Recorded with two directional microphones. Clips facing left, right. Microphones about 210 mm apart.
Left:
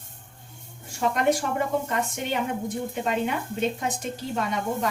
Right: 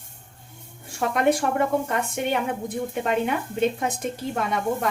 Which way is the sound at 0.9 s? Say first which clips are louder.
Right 2 dB; 55° right (ahead or behind).